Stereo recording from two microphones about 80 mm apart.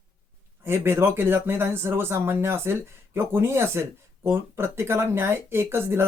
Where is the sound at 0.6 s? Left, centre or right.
Right.